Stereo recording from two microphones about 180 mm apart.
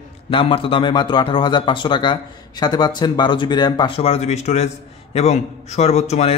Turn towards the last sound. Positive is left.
turn(degrees=40)  # may be behind; listen again after turning